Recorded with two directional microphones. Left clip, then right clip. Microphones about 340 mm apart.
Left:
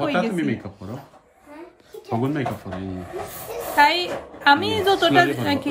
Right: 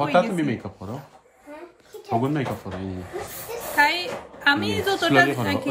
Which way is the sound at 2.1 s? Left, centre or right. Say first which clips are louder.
Right 1 dB; centre.